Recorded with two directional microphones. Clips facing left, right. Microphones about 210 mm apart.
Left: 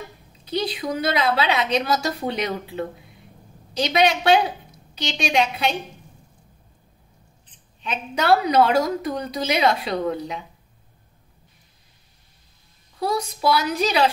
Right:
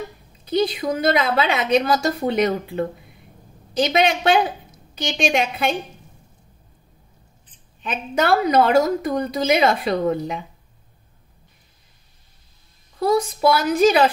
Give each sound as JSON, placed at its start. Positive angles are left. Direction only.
{"t": 0.5, "sound": "a woman's voice", "side_deg": -45}
{"t": 7.8, "sound": "a woman's voice", "side_deg": -50}
{"t": 13.0, "sound": "a woman's voice", "side_deg": -50}